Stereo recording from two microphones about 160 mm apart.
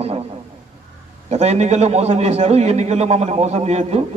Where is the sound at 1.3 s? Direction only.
45° right (ahead or behind).